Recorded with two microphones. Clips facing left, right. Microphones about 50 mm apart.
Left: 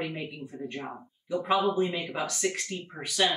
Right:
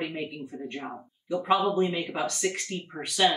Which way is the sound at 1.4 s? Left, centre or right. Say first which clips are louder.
Right 2 dB; centre.